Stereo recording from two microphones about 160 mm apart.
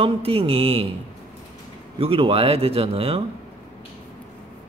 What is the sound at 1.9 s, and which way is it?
A man's voice, 35° right (ahead or behind).